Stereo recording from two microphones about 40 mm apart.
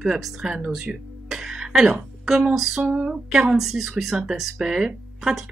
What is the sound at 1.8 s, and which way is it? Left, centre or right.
A woman's voice, centre.